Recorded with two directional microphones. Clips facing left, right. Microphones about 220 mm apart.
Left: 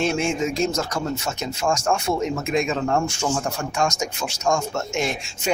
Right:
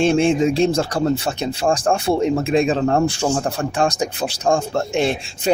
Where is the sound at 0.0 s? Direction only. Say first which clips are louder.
Right 7 dB; 30° right (ahead or behind).